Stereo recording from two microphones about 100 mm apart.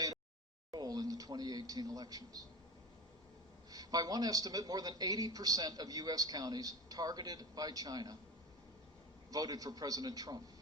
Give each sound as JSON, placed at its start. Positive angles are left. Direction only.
{"t": 0.7, "sound": "a man's voice", "side_deg": -40}
{"t": 3.7, "sound": "a woman's voice", "side_deg": -40}
{"t": 9.3, "sound": "a woman's voice", "side_deg": -35}